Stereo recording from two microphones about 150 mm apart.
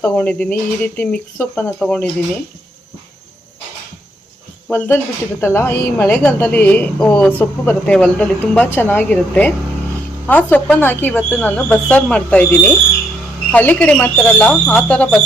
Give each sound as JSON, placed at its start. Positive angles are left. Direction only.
{"t": 0.0, "sound": "a woman's voice", "side_deg": 10}
{"t": 4.7, "sound": "a woman's voice", "side_deg": 15}